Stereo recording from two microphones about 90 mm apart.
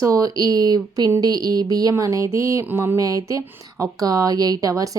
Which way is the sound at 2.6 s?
25° right (ahead or behind).